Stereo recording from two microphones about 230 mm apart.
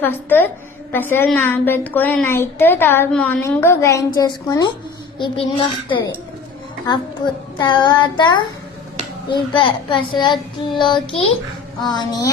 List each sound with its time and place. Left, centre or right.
0.0 s a woman's voice: centre
7.6 s a child's voice: centre